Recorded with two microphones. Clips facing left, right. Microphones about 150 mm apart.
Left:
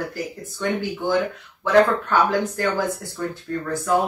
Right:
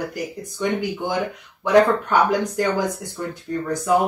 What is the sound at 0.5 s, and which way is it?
Speech, 15° right (ahead or behind).